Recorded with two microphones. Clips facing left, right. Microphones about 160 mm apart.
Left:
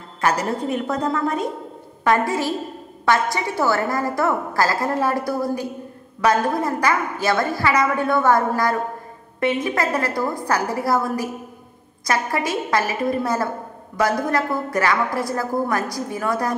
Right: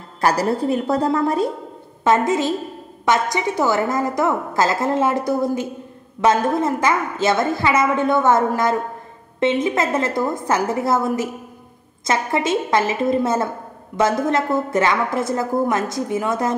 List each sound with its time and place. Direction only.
0.2 s a woman's voice: 35° right (ahead or behind)
2.0 s a woman's voice: 20° right (ahead or behind)